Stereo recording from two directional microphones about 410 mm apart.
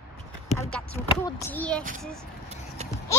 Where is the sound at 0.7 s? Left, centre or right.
Centre.